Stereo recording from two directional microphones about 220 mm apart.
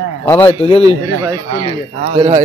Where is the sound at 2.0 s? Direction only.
30° right (ahead or behind).